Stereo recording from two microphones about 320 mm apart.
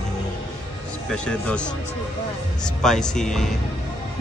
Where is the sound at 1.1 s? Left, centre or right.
Centre.